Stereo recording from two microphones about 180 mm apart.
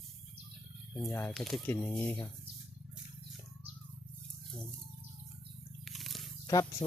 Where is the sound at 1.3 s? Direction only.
Centre (ahead or behind).